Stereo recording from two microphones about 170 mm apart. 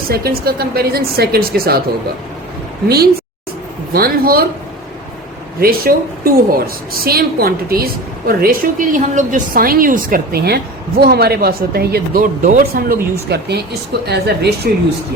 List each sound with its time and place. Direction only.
0.1 s a woman's voice: 65° right (ahead or behind)
3.9 s a woman's voice: 60° right (ahead or behind)
5.5 s a woman's voice: 60° right (ahead or behind)